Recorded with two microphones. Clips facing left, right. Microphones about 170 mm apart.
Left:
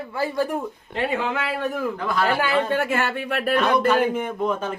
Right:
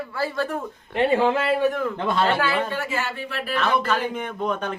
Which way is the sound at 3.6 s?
15° left (ahead or behind).